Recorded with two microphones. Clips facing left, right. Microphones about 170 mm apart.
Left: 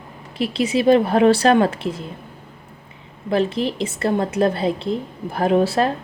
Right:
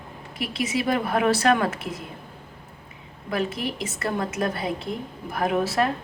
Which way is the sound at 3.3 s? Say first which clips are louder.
Left 7 dB; 30° left (ahead or behind).